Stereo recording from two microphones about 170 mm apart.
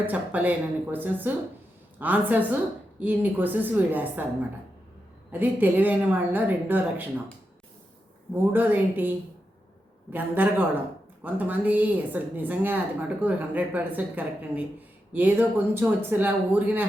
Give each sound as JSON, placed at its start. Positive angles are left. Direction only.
{"t": 0.0, "sound": "a woman's voice", "side_deg": -10}
{"t": 8.4, "sound": "a woman's voice", "side_deg": -10}